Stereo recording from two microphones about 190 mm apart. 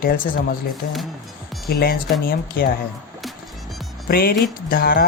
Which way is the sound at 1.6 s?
50° left (ahead or behind).